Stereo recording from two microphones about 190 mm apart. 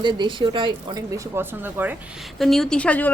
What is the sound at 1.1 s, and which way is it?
Speech, 10° right (ahead or behind).